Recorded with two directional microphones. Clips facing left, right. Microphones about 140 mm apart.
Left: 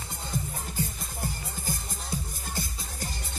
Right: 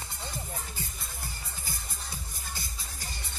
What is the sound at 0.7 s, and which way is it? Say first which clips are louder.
Music: left 8 dB; 45° left (ahead or behind).